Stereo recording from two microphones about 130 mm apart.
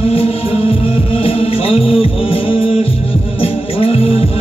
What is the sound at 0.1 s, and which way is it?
Music, 50° left (ahead or behind).